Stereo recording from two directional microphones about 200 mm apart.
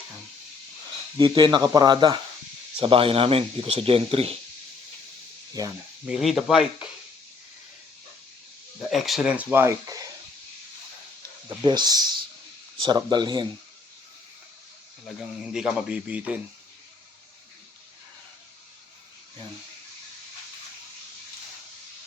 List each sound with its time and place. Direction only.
1.2 s speech: 25° right (ahead or behind)
5.6 s speech: 15° right (ahead or behind)
6.1 s speech: centre (ahead or behind)
8.9 s speech: centre (ahead or behind)
11.4 s speech: 20° right (ahead or behind)
15.0 s speech: centre (ahead or behind)